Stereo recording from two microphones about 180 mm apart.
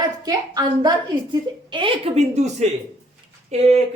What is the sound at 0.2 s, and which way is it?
Speech, 20° right (ahead or behind).